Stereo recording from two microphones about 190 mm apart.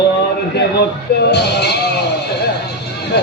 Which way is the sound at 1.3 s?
60° left (ahead or behind).